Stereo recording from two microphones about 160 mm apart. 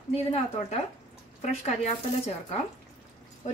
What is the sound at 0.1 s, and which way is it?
Speech, 40° left (ahead or behind).